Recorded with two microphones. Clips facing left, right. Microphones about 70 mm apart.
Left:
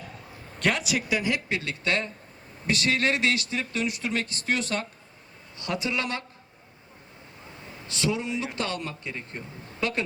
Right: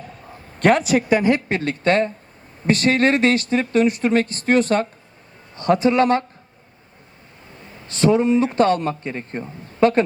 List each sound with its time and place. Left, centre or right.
0.3 s speech: right
7.9 s speech: right